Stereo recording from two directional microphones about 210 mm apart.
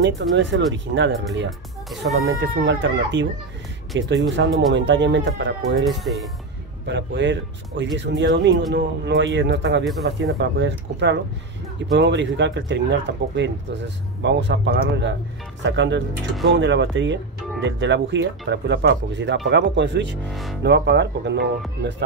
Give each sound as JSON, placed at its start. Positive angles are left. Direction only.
{"t": 0.0, "sound": "speech", "side_deg": -60}
{"t": 1.9, "sound": "speech", "side_deg": 0}
{"t": 2.4, "sound": "speech", "side_deg": -60}
{"t": 5.9, "sound": "speech", "side_deg": 0}
{"t": 6.9, "sound": "speech", "side_deg": -55}